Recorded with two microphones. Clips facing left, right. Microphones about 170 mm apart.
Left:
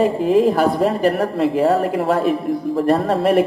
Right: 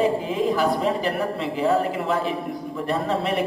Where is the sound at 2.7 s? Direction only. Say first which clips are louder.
Left 7 dB; 60° left (ahead or behind).